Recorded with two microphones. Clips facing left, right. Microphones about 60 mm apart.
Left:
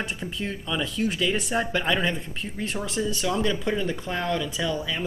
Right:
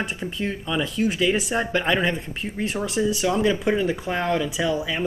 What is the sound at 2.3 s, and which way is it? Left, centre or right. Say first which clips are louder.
Speech: right 4 dB; centre.